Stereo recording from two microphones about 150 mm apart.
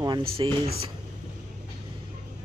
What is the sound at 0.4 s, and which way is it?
Speech, 30° right (ahead or behind).